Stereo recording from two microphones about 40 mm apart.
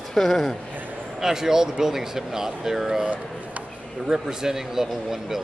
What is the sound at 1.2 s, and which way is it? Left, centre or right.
Speech, centre.